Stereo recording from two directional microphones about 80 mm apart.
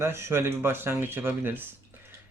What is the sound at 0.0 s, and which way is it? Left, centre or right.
Speech, right.